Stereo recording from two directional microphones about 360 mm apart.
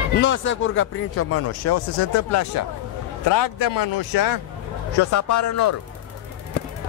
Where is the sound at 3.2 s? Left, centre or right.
Left.